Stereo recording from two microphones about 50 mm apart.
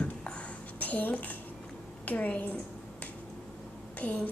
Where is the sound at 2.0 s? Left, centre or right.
Left.